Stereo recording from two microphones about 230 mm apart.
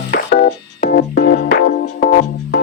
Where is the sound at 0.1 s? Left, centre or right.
Left.